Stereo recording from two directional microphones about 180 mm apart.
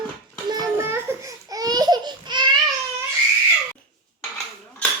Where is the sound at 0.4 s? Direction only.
20° right (ahead or behind).